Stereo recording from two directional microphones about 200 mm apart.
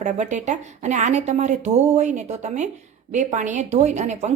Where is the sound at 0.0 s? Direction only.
35° right (ahead or behind).